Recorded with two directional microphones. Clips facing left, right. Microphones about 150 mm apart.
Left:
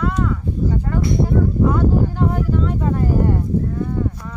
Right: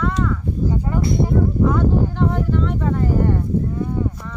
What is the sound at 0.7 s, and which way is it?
Speech, 15° right (ahead or behind).